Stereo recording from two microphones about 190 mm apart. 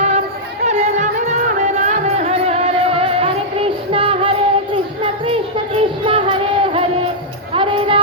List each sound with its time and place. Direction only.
0.6 s music: 35° right (ahead or behind)